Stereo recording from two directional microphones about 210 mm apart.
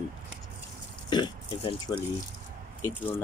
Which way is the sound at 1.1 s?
20° left (ahead or behind).